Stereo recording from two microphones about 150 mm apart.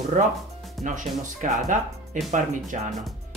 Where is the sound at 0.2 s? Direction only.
55° right (ahead or behind).